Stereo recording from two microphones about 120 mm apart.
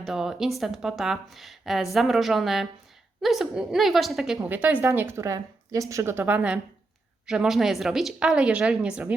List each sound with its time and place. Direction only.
0.0 s a woman's voice: 5° right (ahead or behind)
4.4 s a woman's voice: 15° right (ahead or behind)